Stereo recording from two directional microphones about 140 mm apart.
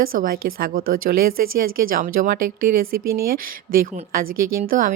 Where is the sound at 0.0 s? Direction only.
90° right.